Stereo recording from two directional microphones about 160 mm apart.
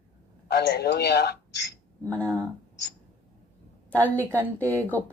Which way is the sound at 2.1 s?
10° left (ahead or behind).